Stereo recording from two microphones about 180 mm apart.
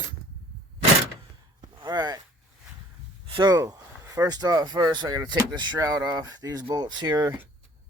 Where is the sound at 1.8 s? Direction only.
20° right (ahead or behind).